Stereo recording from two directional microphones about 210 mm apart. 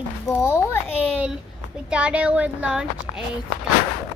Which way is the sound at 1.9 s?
5° right (ahead or behind).